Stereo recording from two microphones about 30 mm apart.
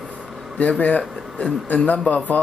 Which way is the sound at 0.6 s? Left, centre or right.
Left.